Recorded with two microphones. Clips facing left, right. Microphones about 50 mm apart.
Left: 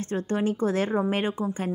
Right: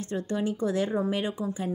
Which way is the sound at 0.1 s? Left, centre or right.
Left.